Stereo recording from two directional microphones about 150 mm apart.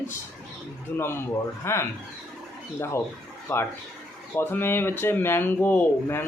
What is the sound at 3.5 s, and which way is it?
Speech, 15° left (ahead or behind).